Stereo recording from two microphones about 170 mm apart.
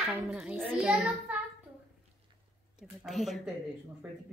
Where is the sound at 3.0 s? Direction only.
Centre (ahead or behind).